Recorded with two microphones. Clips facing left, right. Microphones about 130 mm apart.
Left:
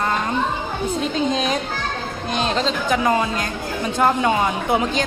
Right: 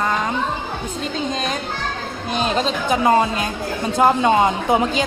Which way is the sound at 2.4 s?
10° right (ahead or behind).